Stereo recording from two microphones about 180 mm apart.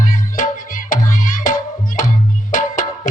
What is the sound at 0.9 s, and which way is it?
Music, 50° left (ahead or behind).